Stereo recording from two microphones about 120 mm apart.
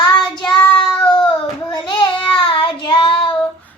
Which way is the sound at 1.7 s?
40° left (ahead or behind).